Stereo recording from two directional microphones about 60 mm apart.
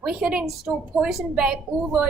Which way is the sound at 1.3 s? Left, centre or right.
Centre.